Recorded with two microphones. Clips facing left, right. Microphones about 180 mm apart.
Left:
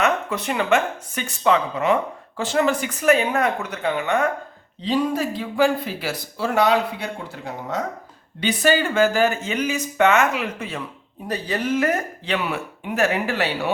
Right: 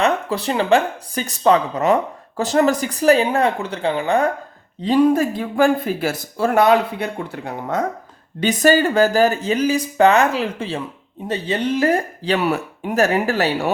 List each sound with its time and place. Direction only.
0.0 s speech: 30° right (ahead or behind)
4.8 s speech: 50° right (ahead or behind)
8.4 s speech: 45° right (ahead or behind)